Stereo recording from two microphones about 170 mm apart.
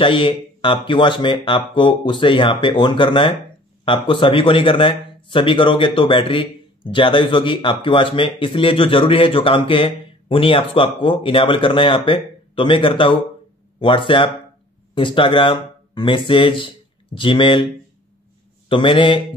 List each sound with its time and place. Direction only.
0.0 s speech: 30° left (ahead or behind)
18.7 s speech: 30° left (ahead or behind)